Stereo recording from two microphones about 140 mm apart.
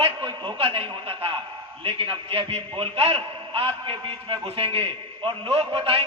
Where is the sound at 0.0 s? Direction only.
35° right (ahead or behind).